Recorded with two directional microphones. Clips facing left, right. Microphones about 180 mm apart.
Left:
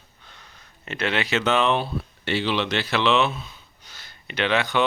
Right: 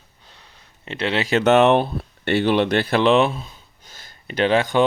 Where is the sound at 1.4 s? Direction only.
65° right (ahead or behind).